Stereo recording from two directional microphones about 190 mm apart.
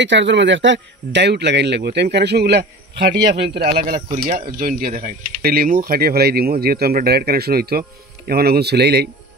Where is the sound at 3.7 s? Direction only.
50° right (ahead or behind).